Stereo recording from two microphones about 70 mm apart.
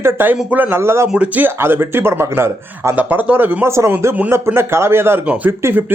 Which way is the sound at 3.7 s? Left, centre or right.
Right.